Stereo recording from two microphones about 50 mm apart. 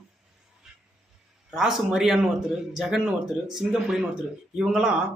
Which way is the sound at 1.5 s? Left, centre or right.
Centre.